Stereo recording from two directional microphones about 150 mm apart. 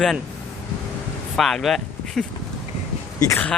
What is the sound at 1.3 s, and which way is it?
Speech, centre (ahead or behind).